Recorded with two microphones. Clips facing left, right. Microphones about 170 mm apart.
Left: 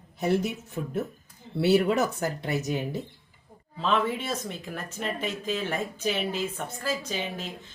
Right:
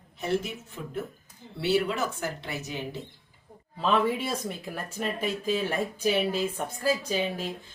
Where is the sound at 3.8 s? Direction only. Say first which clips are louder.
Right 1 dB; 10° right (ahead or behind).